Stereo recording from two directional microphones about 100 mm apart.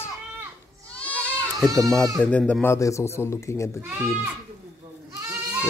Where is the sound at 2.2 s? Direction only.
10° left (ahead or behind).